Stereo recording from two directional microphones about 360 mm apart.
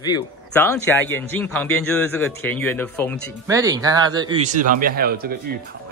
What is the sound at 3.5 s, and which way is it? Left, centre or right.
A woman's voice, centre.